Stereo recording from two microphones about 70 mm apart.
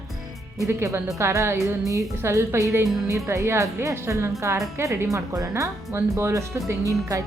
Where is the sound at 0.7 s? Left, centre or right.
Right.